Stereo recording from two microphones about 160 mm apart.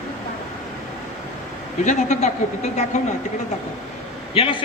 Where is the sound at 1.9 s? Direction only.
45° left (ahead or behind).